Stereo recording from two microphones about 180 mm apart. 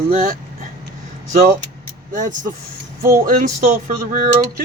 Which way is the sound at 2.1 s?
45° right (ahead or behind).